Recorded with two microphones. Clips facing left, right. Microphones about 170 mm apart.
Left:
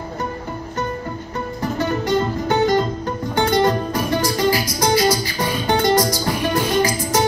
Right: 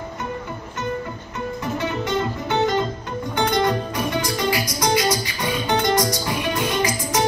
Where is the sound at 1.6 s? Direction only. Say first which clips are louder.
Left 4 dB; 35° left (ahead or behind).